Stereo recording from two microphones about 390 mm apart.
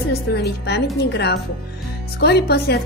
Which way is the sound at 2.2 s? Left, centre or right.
Left.